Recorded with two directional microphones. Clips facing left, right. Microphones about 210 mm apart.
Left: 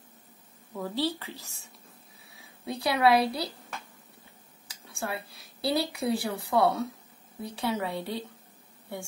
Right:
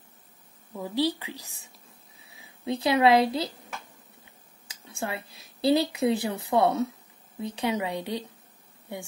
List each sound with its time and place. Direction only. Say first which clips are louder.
0.7 s speech: right 3 dB; 15° right (ahead or behind)
4.6 s a woman's voice: right 2 dB; 20° right (ahead or behind)